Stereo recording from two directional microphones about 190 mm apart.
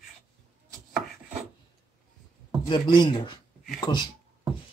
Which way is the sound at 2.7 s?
25° left (ahead or behind).